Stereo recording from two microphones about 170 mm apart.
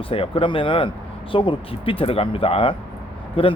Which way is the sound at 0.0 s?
30° left (ahead or behind).